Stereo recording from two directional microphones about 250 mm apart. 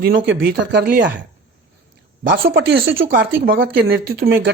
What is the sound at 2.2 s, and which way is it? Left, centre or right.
A man's voice, right.